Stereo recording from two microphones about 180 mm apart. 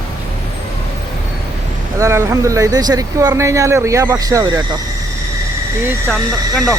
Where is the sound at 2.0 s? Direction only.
15° right (ahead or behind).